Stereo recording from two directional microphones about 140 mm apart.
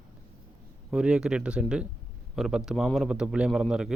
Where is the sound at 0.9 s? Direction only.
5° right (ahead or behind).